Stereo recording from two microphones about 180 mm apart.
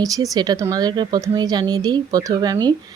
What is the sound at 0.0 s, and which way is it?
A woman's voice, 20° right (ahead or behind).